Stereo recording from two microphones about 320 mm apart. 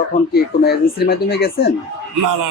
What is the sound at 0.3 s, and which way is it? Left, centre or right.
Speech, left.